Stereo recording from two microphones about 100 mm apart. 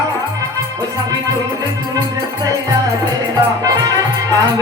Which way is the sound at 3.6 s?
40° right (ahead or behind).